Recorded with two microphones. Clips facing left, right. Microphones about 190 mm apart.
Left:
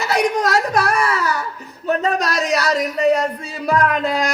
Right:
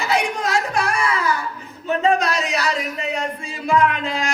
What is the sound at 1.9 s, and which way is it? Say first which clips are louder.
Speech: right 1 dB; 40° left (ahead or behind).